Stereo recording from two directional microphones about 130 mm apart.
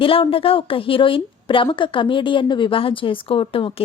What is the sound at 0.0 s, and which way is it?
A woman's voice, 45° left (ahead or behind).